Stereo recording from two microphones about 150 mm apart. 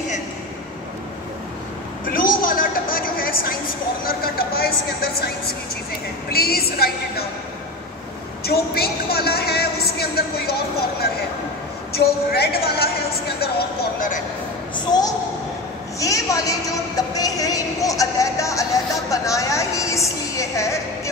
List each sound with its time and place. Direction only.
2.0 s a sound: 70° left (ahead or behind)
4.0 s speech: 85° left
6.3 s speech: 90° left
8.5 s speech: 90° left; by 14.2 s 65° left (ahead or behind)
14.9 s a child's voice: 25° left (ahead or behind)